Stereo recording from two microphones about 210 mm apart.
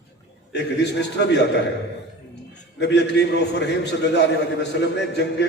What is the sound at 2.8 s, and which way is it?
A man's voice, 55° left (ahead or behind).